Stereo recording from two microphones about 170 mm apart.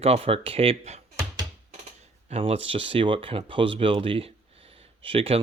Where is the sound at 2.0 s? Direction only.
40° right (ahead or behind).